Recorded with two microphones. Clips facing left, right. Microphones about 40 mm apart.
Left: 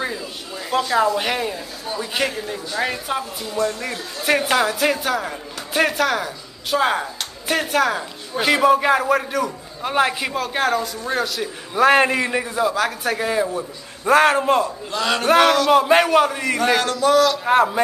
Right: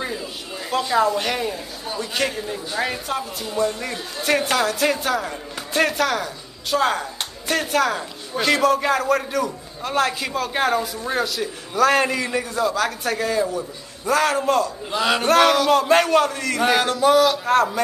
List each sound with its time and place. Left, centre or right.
0.7 s speech: centre
10.3 s a man's voice: centre
11.7 s a man's voice: left
12.3 s speech: centre
13.2 s a man's voice: left
13.5 s a man's voice: left
14.4 s a man's voice: left
14.9 s a sound: centre
15.2 s speech: centre
16.5 s a sound: centre
17.5 s a man's voice: centre